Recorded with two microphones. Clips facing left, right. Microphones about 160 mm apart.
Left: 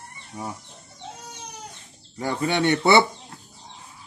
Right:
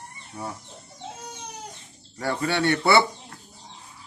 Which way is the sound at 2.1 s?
20° left (ahead or behind).